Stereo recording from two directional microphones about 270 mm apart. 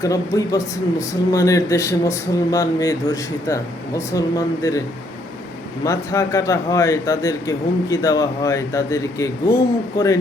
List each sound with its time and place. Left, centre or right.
0.0 s speech: centre
5.8 s speech: centre